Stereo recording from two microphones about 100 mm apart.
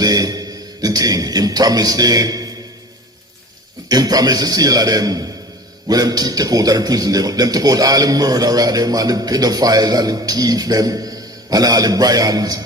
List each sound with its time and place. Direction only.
0.0 s a man's voice: 40° right (ahead or behind)
3.8 s a man's voice: 40° right (ahead or behind)